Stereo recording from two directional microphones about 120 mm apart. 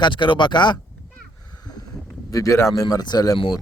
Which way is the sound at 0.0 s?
40° left (ahead or behind).